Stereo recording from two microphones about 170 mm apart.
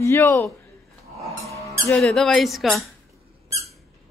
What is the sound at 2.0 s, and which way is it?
Speech, centre (ahead or behind).